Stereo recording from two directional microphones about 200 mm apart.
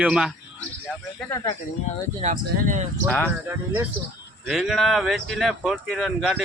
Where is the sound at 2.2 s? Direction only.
40° right (ahead or behind).